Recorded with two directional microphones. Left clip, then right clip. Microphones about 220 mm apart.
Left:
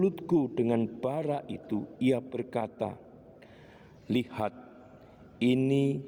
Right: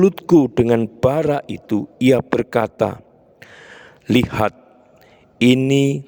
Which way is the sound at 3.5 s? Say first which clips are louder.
Right 14 dB; 50° right (ahead or behind).